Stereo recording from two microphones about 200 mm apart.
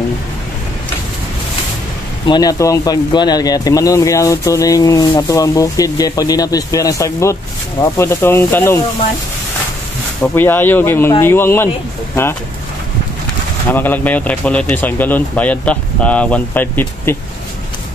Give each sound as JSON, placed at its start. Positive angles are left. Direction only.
{"t": 2.2, "sound": "speech", "side_deg": 20}
{"t": 10.2, "sound": "speech", "side_deg": 10}
{"t": 13.7, "sound": "speech", "side_deg": 10}